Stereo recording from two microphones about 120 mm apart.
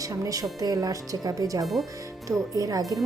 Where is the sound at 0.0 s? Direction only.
30° right (ahead or behind).